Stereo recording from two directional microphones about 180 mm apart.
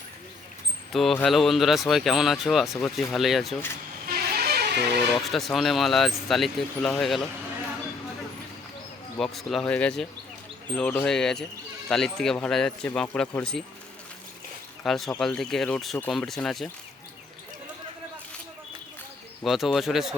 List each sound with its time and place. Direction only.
0.9 s speech: centre (ahead or behind)
4.0 s music: 55° right (ahead or behind)
5.2 s speech: centre (ahead or behind)
9.1 s speech: centre (ahead or behind)
14.8 s speech: centre (ahead or behind)
19.5 s speech: centre (ahead or behind)